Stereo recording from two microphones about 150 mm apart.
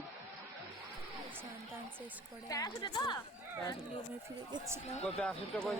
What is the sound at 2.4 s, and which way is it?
Speech, 25° left (ahead or behind).